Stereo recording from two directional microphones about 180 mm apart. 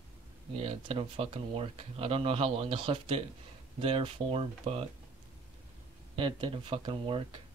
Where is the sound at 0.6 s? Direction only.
30° right (ahead or behind).